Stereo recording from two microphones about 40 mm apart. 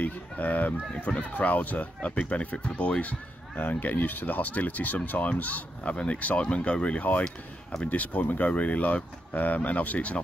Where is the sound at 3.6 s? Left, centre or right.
Left.